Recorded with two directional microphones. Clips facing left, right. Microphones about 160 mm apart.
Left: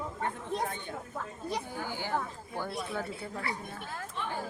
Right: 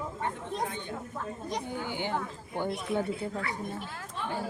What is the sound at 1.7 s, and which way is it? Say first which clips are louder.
Speech: right 2 dB; 20° right (ahead or behind).